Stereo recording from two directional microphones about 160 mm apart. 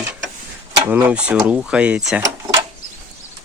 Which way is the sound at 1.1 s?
5° right (ahead or behind).